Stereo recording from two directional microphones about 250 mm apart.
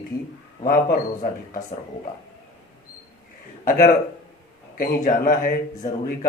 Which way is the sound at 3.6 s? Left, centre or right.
Left.